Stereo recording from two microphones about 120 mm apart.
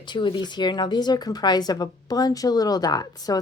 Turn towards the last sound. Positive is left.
turn(degrees=35)  # may be behind; listen again after turning